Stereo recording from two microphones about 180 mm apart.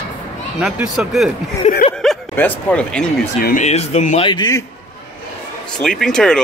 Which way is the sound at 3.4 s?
55° left (ahead or behind).